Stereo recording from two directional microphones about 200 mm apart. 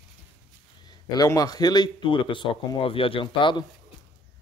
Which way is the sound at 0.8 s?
20° left (ahead or behind).